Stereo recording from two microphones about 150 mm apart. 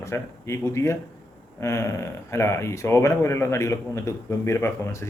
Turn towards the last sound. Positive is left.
turn(degrees=20)  # may be behind; listen again after turning